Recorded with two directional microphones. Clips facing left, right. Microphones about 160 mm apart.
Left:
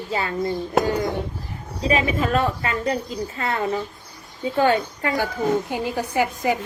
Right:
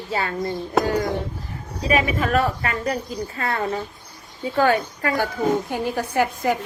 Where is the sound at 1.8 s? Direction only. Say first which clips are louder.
Even; 30° left (ahead or behind).